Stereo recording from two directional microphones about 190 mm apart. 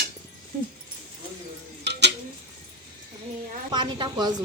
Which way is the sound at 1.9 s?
65° right (ahead or behind).